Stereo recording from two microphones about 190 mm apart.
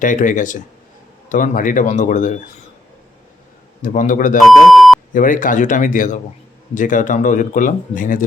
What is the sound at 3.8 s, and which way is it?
Speech, 40° left (ahead or behind).